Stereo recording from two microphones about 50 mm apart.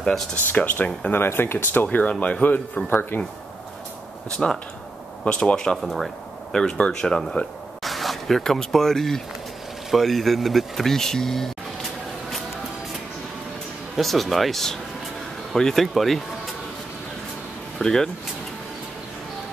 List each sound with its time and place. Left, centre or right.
0.5 s speech: left
1.1 s speech: left
2.9 s speech: left
4.4 s speech: centre
5.2 s speech: left
5.6 s speech: centre
7.8 s speech: centre
13.9 s speech: centre
17.7 s speech: centre